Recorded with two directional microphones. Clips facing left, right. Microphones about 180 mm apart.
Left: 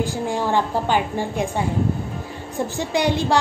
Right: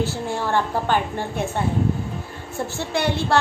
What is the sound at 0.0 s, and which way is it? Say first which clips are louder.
A woman's voice: left 2 dB; 15° left (ahead or behind).